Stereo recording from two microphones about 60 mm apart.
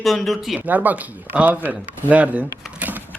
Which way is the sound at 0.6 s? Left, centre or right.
Right.